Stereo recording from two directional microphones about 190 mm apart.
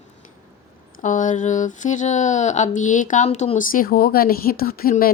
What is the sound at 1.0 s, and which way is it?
Speech, 40° left (ahead or behind).